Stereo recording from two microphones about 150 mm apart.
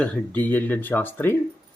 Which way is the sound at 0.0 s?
10° left (ahead or behind).